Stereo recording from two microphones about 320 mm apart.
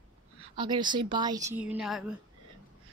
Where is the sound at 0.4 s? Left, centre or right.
Centre.